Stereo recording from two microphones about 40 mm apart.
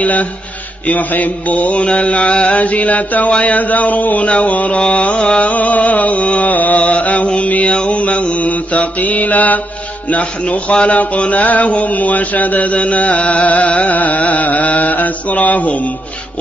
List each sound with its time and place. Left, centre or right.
0.0 s mantra: left
5.4 s mantra: left